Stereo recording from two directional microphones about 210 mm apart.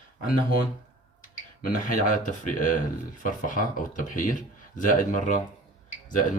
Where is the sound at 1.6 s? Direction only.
40° left (ahead or behind).